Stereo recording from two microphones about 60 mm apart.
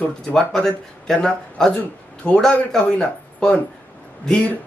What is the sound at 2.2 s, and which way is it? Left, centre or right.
A man's voice, centre.